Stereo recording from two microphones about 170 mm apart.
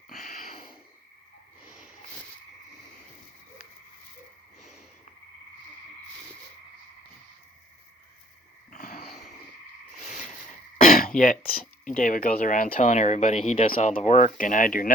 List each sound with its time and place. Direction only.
0.2 s a sound: 45° left (ahead or behind)
8.7 s a sound: 50° left (ahead or behind)
10.8 s throat clearing: 50° left (ahead or behind)
11.2 s speech: 55° left (ahead or behind)
12.7 s speech: 45° left (ahead or behind)
13.9 s speech: 55° left (ahead or behind)